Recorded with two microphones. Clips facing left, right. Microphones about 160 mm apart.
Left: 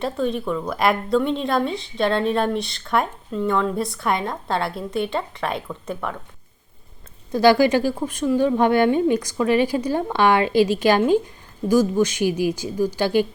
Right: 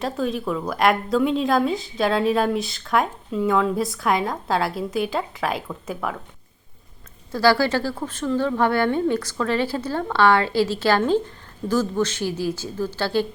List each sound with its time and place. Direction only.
0.0 s a woman's voice: centre (ahead or behind)
7.3 s a woman's voice: 20° left (ahead or behind)